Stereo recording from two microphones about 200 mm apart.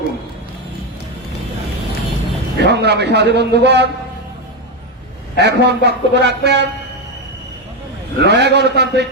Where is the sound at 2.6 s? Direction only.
55° right (ahead or behind).